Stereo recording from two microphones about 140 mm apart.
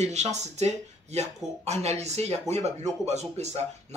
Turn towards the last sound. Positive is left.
turn(degrees=-50)  # may be behind; listen again after turning